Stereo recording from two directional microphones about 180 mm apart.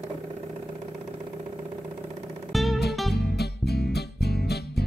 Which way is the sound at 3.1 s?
65° left (ahead or behind).